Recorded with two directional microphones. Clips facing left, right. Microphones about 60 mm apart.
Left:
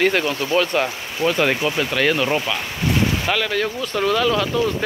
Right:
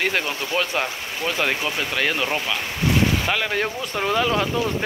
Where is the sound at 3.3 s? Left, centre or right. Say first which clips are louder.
Left 2 dB; centre.